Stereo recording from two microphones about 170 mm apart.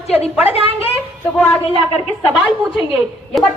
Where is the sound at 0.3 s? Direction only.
35° left (ahead or behind).